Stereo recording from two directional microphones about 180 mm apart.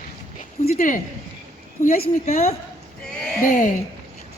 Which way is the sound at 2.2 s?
35° left (ahead or behind).